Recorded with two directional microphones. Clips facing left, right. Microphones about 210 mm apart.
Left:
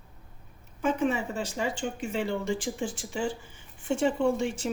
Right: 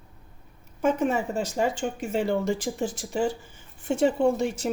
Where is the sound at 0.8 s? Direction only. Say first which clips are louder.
Right 3 dB; 45° right (ahead or behind).